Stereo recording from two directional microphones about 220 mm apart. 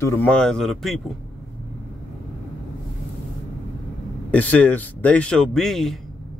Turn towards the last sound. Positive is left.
turn(degrees=0)  # may be behind; listen again after turning